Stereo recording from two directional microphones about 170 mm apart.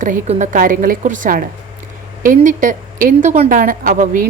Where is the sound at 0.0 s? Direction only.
50° right (ahead or behind).